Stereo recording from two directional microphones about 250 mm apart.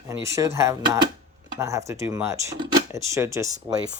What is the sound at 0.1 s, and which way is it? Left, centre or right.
Speech, centre.